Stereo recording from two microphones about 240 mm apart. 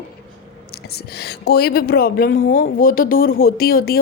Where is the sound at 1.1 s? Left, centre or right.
Left.